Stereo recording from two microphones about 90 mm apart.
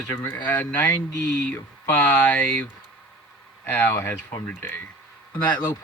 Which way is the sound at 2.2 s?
15° left (ahead or behind).